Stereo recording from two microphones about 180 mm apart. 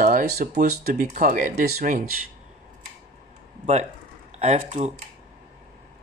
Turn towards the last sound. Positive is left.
turn(degrees=-40)  # may be behind; listen again after turning